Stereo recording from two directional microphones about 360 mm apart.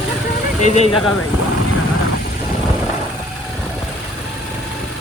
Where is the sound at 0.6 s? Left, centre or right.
Centre.